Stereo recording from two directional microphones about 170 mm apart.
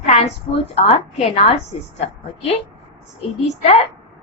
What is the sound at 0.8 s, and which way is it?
Speech, 35° left (ahead or behind).